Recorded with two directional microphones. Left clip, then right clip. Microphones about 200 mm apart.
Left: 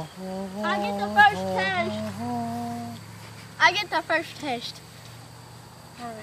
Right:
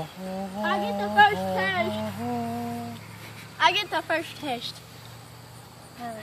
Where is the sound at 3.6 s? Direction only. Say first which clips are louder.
Left 1 dB; 10° left (ahead or behind).